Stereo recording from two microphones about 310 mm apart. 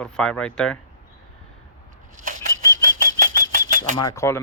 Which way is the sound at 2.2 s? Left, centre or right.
Right.